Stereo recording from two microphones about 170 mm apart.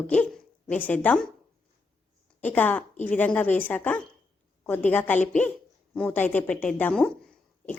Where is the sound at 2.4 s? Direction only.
10° left (ahead or behind).